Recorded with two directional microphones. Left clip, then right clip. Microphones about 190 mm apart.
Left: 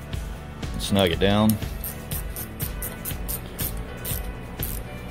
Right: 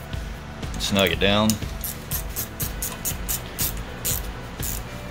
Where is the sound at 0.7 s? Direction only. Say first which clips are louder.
Right 1 dB; 30° left (ahead or behind).